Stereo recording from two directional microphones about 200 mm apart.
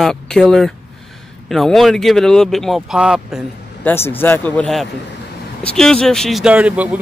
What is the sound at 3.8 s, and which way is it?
A man's voice, 10° left (ahead or behind).